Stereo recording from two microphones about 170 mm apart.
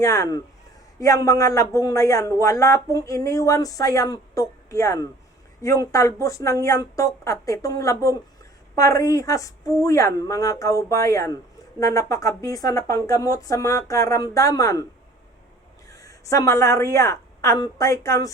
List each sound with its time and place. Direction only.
0.0 s speech: 20° left (ahead or behind)
15.9 s a woman's voice: 20° left (ahead or behind)